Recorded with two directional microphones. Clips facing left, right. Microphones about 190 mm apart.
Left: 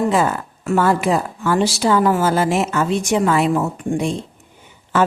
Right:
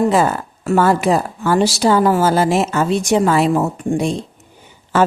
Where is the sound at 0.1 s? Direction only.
35° right (ahead or behind).